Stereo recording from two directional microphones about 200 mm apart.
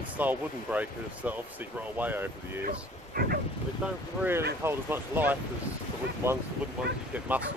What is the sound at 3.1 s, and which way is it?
Bow-wow, 50° right (ahead or behind).